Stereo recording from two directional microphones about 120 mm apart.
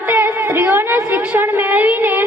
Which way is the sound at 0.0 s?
15° right (ahead or behind).